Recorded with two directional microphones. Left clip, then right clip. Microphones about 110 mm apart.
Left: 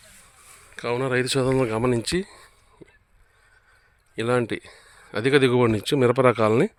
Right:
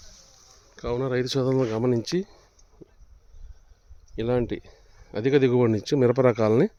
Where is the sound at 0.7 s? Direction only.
15° right (ahead or behind).